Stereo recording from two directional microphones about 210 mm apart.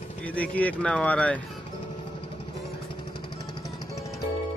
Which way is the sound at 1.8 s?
25° left (ahead or behind).